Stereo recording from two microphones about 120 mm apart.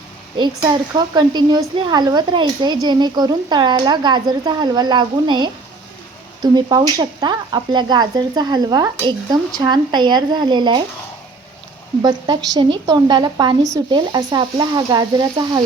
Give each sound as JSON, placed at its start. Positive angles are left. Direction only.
{"t": 0.3, "sound": "speech", "side_deg": -35}
{"t": 12.0, "sound": "speech", "side_deg": -35}